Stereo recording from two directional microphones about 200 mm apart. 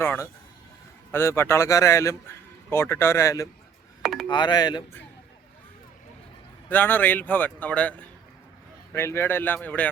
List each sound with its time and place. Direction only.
0.0 s a man's voice: 10° left (ahead or behind)
4.0 s a sound: centre (ahead or behind)
4.3 s speech: 20° left (ahead or behind)
6.7 s a man's voice: 10° left (ahead or behind)